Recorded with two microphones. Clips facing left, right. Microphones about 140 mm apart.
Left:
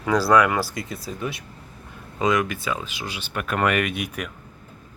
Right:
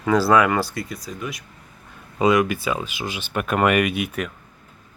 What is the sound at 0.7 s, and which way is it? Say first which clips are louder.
Speech: right 1 dB; 30° left (ahead or behind).